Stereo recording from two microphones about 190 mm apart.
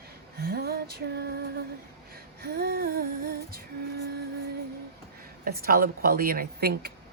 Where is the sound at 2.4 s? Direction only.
55° right (ahead or behind).